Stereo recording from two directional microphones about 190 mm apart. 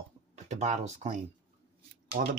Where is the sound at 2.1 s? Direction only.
55° right (ahead or behind).